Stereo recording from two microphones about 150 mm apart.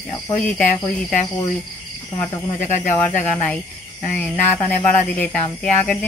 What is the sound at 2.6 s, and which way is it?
Speech, 55° left (ahead or behind).